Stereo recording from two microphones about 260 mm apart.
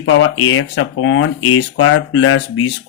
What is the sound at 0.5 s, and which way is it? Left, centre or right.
Speech, left.